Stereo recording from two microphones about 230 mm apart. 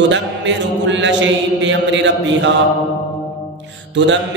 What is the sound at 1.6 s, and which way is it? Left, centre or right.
Mantra, right.